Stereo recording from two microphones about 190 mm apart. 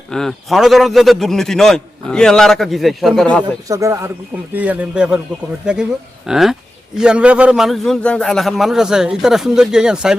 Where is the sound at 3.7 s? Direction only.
15° right (ahead or behind).